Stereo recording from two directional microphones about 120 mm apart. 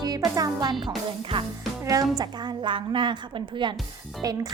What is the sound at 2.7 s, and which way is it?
Speech, 45° right (ahead or behind).